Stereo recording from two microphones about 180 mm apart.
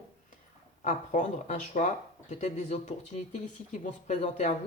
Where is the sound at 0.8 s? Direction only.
45° left (ahead or behind).